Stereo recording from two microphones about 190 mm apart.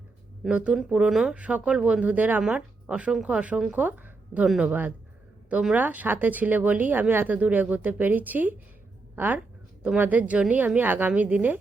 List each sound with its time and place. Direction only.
0.4 s speech: 5° right (ahead or behind)